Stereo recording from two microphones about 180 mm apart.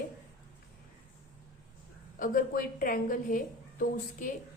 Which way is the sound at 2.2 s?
50° left (ahead or behind).